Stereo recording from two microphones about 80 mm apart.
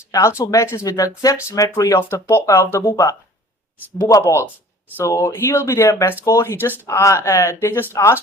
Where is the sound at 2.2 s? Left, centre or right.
Left.